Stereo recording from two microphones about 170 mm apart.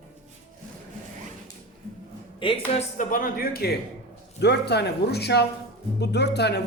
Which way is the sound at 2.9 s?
50° left (ahead or behind).